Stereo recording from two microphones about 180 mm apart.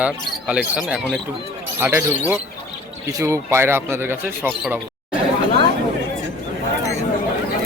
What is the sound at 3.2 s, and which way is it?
A man's voice, 15° right (ahead or behind).